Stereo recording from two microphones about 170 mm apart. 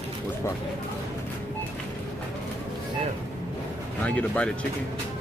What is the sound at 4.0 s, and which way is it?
Speech, 10° left (ahead or behind).